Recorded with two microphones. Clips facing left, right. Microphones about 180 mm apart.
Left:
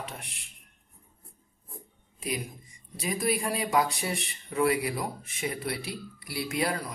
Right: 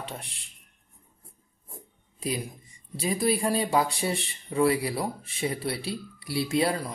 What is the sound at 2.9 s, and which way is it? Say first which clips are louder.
Speech: right 3 dB; 30° right (ahead or behind).